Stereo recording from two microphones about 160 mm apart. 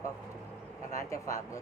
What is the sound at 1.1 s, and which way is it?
Speech, 20° left (ahead or behind).